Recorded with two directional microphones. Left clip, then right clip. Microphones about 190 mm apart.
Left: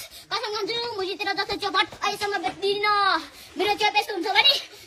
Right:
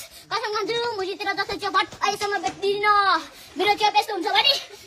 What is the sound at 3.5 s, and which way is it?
A woman's voice, 10° right (ahead or behind).